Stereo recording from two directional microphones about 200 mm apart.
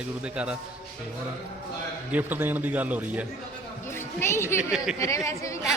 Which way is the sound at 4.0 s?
10° left (ahead or behind).